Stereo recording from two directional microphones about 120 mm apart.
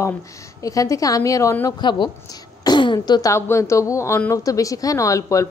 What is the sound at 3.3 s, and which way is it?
A woman's voice, 25° left (ahead or behind).